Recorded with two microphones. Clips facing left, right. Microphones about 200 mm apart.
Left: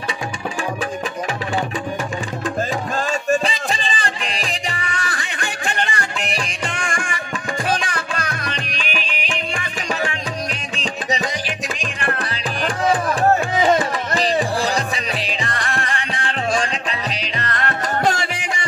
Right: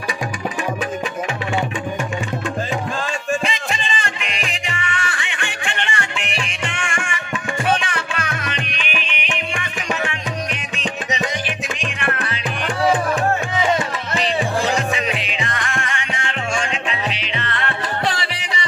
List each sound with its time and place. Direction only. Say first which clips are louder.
3.3 s music: left 3 dB; 35° left (ahead or behind)
10.8 s music: left 1 dB; 35° left (ahead or behind)